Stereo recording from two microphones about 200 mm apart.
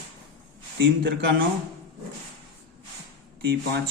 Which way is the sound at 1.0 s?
60° right (ahead or behind).